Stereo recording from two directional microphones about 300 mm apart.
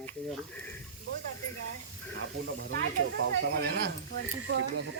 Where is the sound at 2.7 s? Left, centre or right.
Right.